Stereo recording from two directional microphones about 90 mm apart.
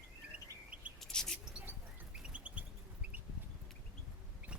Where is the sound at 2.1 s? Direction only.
15° right (ahead or behind).